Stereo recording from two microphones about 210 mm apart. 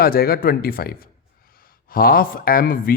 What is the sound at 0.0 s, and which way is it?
Speech, 45° left (ahead or behind).